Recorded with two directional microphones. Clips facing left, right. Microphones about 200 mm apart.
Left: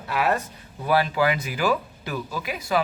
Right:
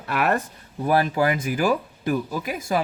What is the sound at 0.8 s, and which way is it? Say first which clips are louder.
Speech: right 1 dB; 45° right (ahead or behind).